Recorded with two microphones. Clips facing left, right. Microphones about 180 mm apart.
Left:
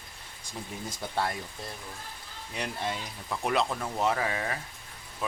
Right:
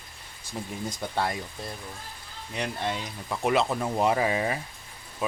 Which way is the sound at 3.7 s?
20° right (ahead or behind).